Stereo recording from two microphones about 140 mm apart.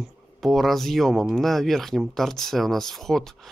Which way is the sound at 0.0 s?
Centre (ahead or behind).